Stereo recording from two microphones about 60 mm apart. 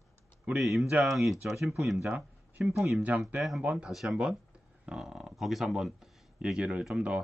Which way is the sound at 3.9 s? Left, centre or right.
Centre.